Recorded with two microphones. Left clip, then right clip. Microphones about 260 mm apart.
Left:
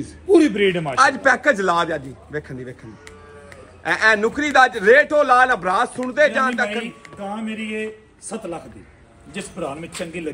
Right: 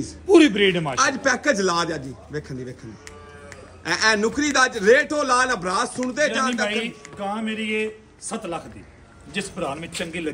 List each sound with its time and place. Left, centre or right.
0.3 s a man's voice: centre
3.8 s a man's voice: centre